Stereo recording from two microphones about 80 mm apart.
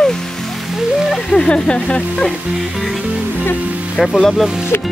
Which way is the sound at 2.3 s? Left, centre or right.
Centre.